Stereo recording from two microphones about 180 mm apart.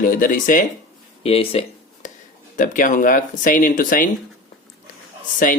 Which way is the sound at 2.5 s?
45° left (ahead or behind).